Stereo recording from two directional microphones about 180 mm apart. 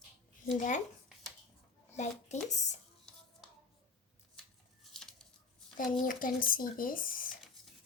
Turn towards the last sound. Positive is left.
turn(degrees=50)  # may be behind; listen again after turning